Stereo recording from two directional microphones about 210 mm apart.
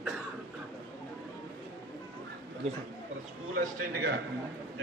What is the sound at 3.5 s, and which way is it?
Speech, 40° right (ahead or behind).